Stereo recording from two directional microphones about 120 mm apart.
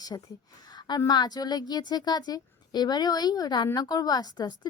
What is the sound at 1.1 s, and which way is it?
A woman's voice, 35° left (ahead or behind).